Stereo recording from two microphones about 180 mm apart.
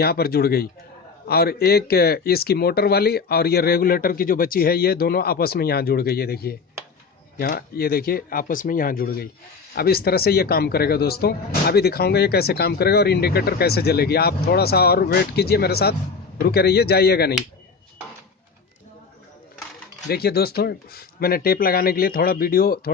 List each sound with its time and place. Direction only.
0.0 s speech: 60° left (ahead or behind)
20.1 s speech: 60° left (ahead or behind)